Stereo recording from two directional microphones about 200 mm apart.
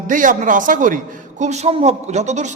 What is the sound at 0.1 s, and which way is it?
A man's voice, 40° right (ahead or behind).